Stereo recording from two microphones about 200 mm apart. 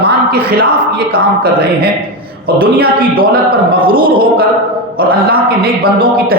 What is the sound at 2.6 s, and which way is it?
Speech, 50° right (ahead or behind).